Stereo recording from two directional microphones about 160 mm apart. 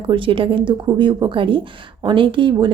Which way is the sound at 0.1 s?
35° right (ahead or behind).